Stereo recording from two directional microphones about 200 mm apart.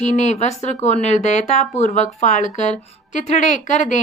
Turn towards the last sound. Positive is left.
turn(degrees=35)  # may be behind; listen again after turning